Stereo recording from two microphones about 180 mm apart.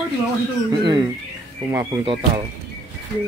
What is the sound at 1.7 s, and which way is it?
Speech, 25° right (ahead or behind).